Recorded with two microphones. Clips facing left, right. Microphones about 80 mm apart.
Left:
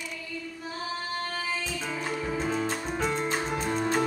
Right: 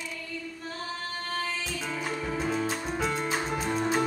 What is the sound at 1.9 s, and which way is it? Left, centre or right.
Music, centre.